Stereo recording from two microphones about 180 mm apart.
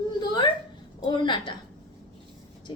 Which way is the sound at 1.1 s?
25° left (ahead or behind).